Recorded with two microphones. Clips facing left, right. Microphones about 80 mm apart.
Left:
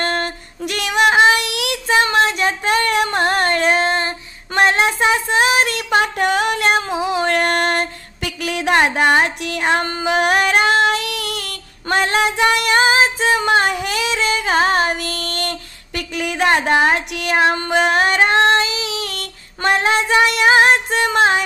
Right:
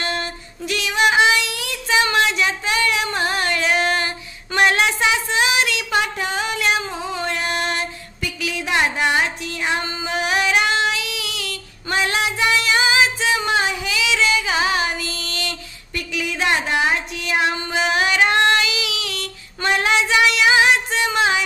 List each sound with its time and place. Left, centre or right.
0.0 s female singing: left
1.4 s child singing: left
2.0 s a sound: left
2.3 s female singing: left
3.8 s female singing: left
4.6 s child singing: left
4.9 s child singing: left
6.9 s female singing: left
17.1 s child singing: left
17.4 s child singing: left
17.6 s female singing: left